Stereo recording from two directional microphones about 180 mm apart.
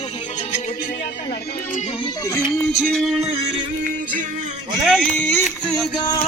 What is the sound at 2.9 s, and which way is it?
Speech, centre (ahead or behind).